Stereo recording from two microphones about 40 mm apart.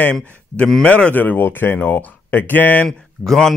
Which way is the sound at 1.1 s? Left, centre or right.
Left.